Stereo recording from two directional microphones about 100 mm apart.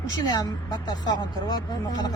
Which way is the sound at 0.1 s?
45° left (ahead or behind).